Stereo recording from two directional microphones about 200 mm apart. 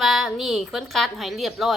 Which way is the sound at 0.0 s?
Centre (ahead or behind).